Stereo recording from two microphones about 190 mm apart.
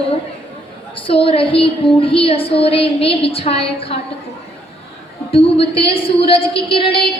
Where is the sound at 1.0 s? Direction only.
30° left (ahead or behind).